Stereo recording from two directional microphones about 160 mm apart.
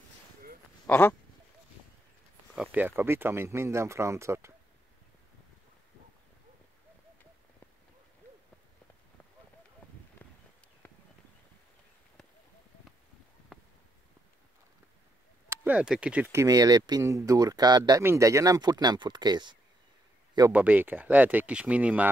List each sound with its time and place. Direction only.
0.8 s speech: 10° left (ahead or behind)
2.5 s speech: 5° right (ahead or behind)
10.2 s a sound: 10° left (ahead or behind)
13.5 s a sound: 5° right (ahead or behind)
15.5 s speech: 10° right (ahead or behind); by 19.5 s 25° right (ahead or behind)
20.3 s speech: 15° right (ahead or behind)